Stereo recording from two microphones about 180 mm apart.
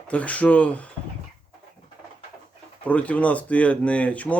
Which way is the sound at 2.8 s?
10° left (ahead or behind).